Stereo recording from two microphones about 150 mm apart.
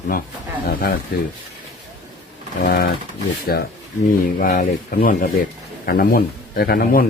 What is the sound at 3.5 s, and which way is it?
Speech, 85° left.